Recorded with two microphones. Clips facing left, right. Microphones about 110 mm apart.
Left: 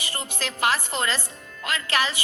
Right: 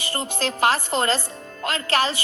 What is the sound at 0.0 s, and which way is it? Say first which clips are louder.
A woman's voice: right 6 dB; 35° right (ahead or behind).